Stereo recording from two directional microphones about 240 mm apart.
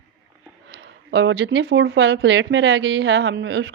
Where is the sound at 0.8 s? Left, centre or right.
Right.